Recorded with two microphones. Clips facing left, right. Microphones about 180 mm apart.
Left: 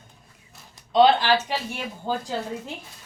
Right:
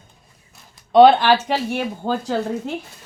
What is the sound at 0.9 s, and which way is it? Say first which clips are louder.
Speech: right 6 dB; 55° right (ahead or behind).